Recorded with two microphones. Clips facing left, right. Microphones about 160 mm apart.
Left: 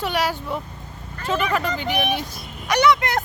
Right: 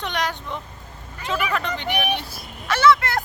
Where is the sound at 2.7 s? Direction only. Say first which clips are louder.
Even; 20° left (ahead or behind).